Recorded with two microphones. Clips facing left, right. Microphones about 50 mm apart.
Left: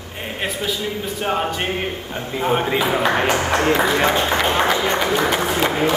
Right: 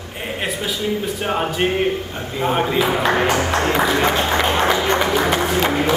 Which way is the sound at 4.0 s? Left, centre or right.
Centre.